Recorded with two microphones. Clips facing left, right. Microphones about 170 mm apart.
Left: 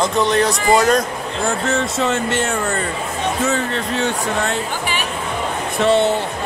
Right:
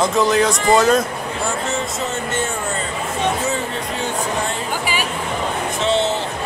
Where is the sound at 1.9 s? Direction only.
75° left (ahead or behind).